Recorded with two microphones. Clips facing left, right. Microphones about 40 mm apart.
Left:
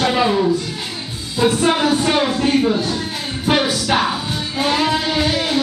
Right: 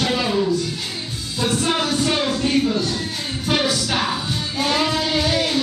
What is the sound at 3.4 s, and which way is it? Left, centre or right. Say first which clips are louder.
Music: left 4 dB; centre.